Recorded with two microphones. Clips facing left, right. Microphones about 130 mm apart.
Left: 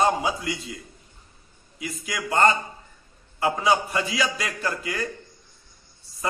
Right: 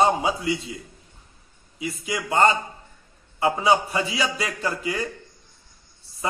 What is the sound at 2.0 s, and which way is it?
A man's voice, 25° right (ahead or behind).